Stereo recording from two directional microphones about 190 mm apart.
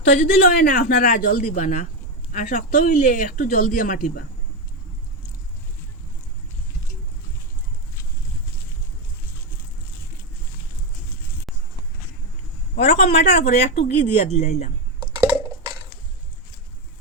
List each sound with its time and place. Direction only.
0.0 s speech: 55° left (ahead or behind)
12.7 s a sound: 35° left (ahead or behind)
13.2 s speech: 35° left (ahead or behind)